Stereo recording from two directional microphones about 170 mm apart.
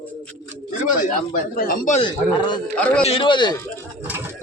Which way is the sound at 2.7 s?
5° left (ahead or behind).